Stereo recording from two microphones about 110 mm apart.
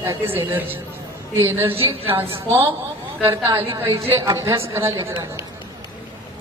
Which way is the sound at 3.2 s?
25° right (ahead or behind).